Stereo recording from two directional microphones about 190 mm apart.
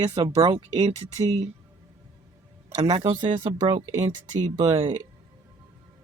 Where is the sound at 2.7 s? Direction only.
35° right (ahead or behind).